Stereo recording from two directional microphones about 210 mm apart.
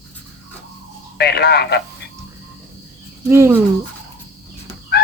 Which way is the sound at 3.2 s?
10° right (ahead or behind).